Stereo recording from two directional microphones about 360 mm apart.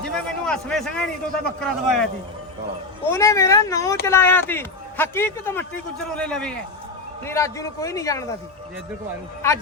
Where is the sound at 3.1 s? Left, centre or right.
Centre.